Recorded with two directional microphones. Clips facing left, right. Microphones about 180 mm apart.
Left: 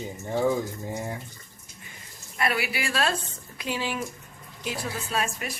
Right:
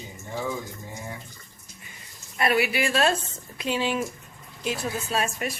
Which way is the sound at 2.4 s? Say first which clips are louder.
Right 5 dB; 25° right (ahead or behind).